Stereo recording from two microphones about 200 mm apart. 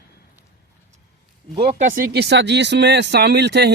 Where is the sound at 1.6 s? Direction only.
50° right (ahead or behind).